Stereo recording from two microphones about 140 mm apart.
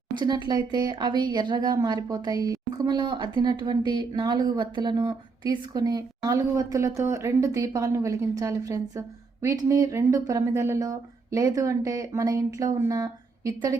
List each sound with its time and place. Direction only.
0.2 s speech: 30° right (ahead or behind)